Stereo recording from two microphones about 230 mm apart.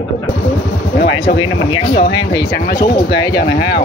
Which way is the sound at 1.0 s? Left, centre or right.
Left.